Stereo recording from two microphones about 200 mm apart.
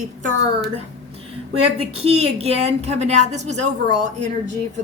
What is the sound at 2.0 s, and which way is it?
A woman's voice, 30° right (ahead or behind).